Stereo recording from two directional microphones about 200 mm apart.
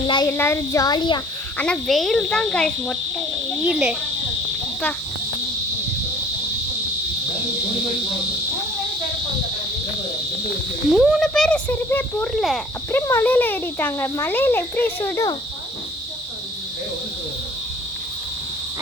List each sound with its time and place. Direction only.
0.3 s speech: 10° left (ahead or behind)
1.5 s a child's voice: 5° left (ahead or behind)
10.9 s a child's voice: centre (ahead or behind)
12.9 s speech: 10° left (ahead or behind)